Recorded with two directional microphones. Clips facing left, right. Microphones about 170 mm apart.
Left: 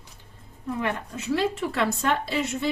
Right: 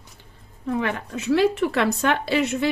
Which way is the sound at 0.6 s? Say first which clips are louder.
Right 3 dB; 90° right.